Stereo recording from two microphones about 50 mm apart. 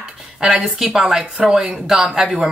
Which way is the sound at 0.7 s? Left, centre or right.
Centre.